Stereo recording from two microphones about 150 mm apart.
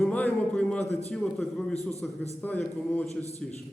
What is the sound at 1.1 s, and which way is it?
A man's voice, 5° left (ahead or behind).